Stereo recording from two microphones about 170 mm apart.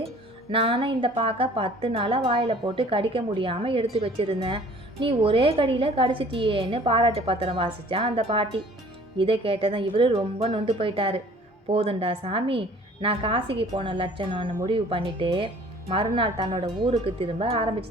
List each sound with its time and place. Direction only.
0.5 s a woman's voice: 35° right (ahead or behind)